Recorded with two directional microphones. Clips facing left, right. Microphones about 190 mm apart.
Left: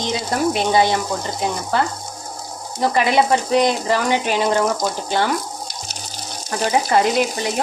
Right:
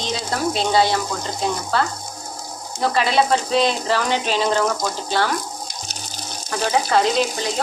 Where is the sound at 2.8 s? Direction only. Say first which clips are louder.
Left 2 dB; 15° left (ahead or behind).